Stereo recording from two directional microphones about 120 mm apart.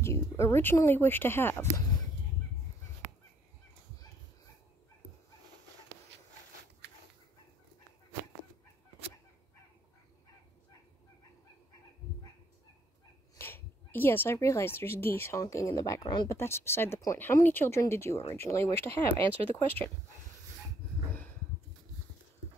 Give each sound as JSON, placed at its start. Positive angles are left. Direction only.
{"t": 0.0, "sound": "speech", "side_deg": 20}
{"t": 13.4, "sound": "speech", "side_deg": 20}
{"t": 16.3, "sound": "speech", "side_deg": 20}